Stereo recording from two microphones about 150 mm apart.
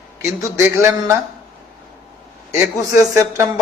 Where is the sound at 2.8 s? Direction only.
20° right (ahead or behind).